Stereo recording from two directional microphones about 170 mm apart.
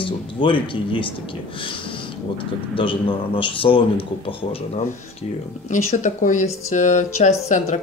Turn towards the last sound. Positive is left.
turn(degrees=45)  # may be behind; listen again after turning